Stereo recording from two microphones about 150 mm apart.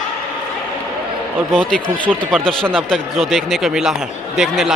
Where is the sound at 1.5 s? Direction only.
5° left (ahead or behind).